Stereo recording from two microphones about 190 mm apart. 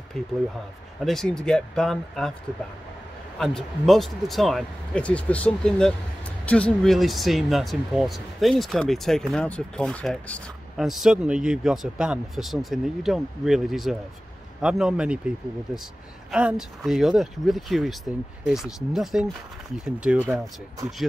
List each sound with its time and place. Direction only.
1.0 s speech: centre (ahead or behind)
3.3 s speech: centre (ahead or behind)